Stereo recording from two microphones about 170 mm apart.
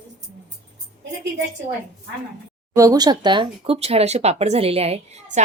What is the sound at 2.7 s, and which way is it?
Speech, 20° right (ahead or behind).